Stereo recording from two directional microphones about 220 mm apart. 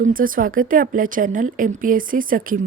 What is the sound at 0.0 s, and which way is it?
Speech, 40° right (ahead or behind).